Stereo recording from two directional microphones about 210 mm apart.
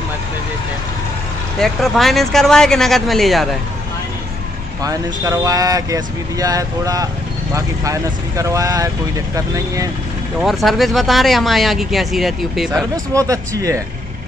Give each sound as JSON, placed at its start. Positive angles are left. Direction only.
{"t": 1.6, "sound": "speech", "side_deg": 0}
{"t": 4.8, "sound": "speech", "side_deg": -15}
{"t": 10.4, "sound": "speech", "side_deg": 0}
{"t": 12.9, "sound": "speech", "side_deg": -15}